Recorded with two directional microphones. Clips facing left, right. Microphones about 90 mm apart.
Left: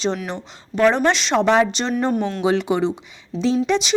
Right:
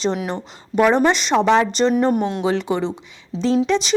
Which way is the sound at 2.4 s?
5° left (ahead or behind).